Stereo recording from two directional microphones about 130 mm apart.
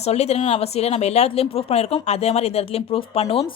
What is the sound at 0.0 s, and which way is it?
A woman's voice, 55° left (ahead or behind).